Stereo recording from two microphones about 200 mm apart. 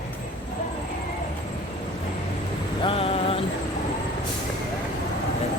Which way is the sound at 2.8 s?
30° left (ahead or behind).